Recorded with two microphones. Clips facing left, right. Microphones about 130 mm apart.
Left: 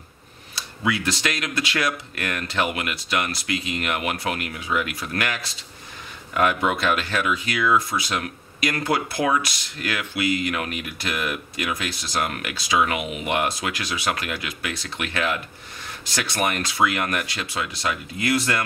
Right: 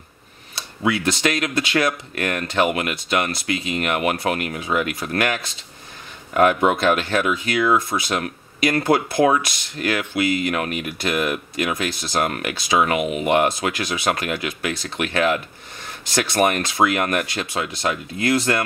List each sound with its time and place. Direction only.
0.8 s speech: 45° right (ahead or behind)
1.7 s speech: 25° right (ahead or behind)
2.1 s speech: 40° right (ahead or behind)
7.7 s speech: 25° right (ahead or behind)
8.2 s speech: 45° right (ahead or behind)